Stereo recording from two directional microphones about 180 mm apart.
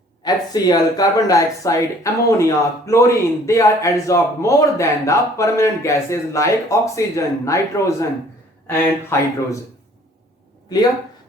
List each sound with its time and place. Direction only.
0.3 s a man's voice: 20° left (ahead or behind)